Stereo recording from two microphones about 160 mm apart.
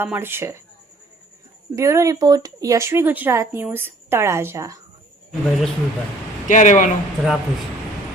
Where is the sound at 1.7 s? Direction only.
20° right (ahead or behind).